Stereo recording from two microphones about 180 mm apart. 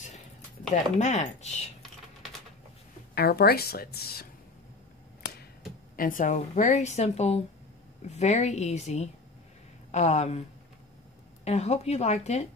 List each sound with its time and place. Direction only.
0.9 s a woman's voice: 40° left (ahead or behind)
3.2 s a woman's voice: 60° left (ahead or behind)
5.9 s a woman's voice: 50° left (ahead or behind)
11.4 s a woman's voice: 35° left (ahead or behind)